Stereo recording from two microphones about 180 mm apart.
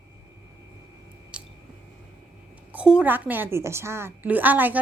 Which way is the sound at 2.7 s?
5° right (ahead or behind).